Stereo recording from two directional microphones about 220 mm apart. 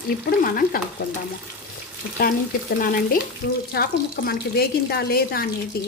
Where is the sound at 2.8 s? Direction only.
40° left (ahead or behind).